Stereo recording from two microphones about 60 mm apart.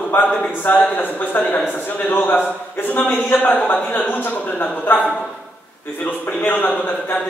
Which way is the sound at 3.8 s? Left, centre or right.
Left.